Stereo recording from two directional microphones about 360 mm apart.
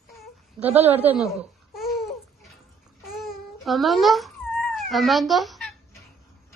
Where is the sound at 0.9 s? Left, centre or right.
Centre.